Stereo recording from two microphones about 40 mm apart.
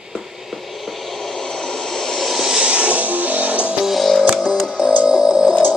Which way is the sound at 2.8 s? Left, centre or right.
Right.